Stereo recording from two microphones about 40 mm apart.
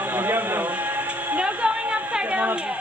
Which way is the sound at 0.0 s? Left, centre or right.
Right.